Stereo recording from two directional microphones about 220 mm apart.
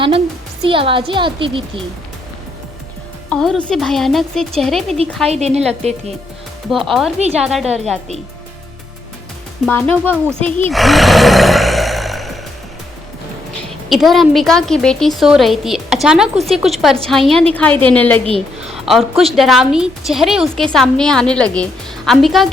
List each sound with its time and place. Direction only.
0.6 s speech: 25° right (ahead or behind)
3.2 s a woman's voice: centre (ahead or behind)
5.3 s speech: 30° right (ahead or behind)
6.7 s a woman's voice: centre (ahead or behind)
9.6 s speech: 5° left (ahead or behind)
13.9 s a woman's voice: centre (ahead or behind)